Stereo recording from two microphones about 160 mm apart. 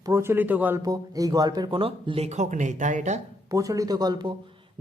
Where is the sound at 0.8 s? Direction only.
20° right (ahead or behind); by 3.2 s 50° right (ahead or behind).